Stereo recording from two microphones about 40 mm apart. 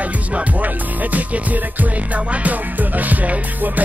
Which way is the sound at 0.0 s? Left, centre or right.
Right.